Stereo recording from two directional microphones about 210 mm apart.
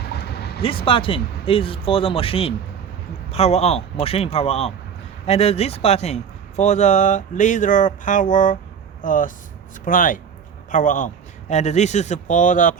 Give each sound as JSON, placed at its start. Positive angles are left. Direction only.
{"t": 0.1, "sound": "vehicle", "side_deg": 50}
{"t": 0.6, "sound": "a man's voice", "side_deg": 25}